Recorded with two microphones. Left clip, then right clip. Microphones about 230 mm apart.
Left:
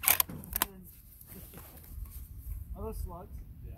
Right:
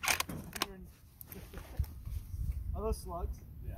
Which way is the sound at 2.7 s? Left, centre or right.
Right.